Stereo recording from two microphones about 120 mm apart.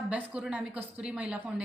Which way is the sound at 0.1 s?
10° right (ahead or behind).